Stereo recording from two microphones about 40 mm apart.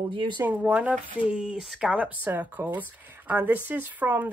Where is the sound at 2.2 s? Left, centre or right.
Right.